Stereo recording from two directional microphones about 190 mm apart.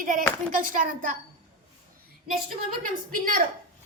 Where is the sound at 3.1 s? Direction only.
45° right (ahead or behind).